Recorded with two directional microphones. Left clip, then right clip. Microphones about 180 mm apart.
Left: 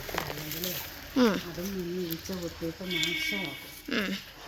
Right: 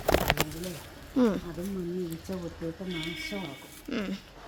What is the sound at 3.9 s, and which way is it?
Speech, 15° right (ahead or behind).